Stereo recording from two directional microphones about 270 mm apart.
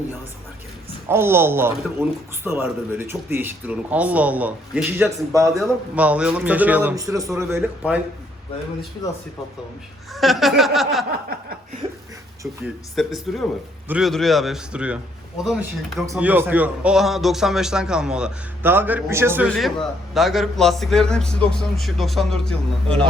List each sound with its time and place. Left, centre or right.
1.0 s a man's voice: centre
10.2 s a man's voice: centre
11.1 s a sound: right
13.0 s a man's voice: centre